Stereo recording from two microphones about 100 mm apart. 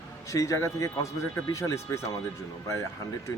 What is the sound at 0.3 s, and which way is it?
Speech, 35° left (ahead or behind).